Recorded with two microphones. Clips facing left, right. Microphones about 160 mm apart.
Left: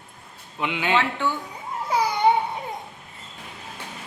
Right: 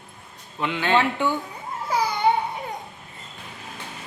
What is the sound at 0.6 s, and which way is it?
Speech, 15° left (ahead or behind).